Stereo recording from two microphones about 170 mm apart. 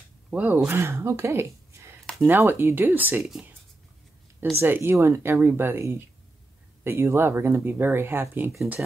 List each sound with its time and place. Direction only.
0.3 s speech: 5° right (ahead or behind)
4.6 s speech: 15° right (ahead or behind)
8.5 s speech: 5° right (ahead or behind)